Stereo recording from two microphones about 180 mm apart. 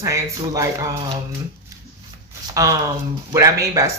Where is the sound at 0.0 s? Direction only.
15° right (ahead or behind).